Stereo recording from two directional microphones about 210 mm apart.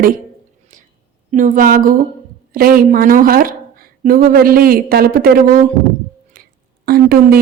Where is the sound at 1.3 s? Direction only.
40° right (ahead or behind).